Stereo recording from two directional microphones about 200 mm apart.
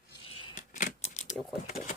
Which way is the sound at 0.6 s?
40° left (ahead or behind).